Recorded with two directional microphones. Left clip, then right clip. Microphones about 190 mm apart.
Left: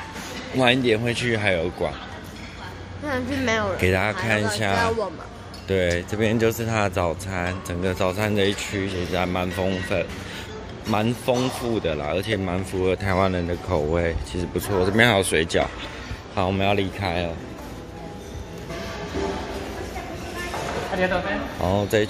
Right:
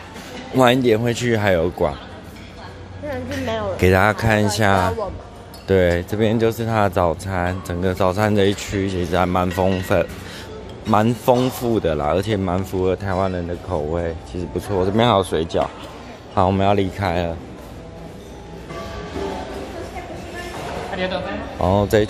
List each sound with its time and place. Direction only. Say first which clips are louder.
0.6 s speech: right 4 dB; 25° right (ahead or behind)
3.1 s speech: left 1 dB; 60° left (ahead or behind)
3.7 s speech: right 6 dB; 30° right (ahead or behind); by 13.1 s 10° right (ahead or behind)
13.1 s speech: even; centre (ahead or behind)
14.7 s speech: right 2 dB; 10° right (ahead or behind)
16.3 s speech: right 5 dB; 25° right (ahead or behind)
21.5 s speech: right 7 dB; 25° right (ahead or behind)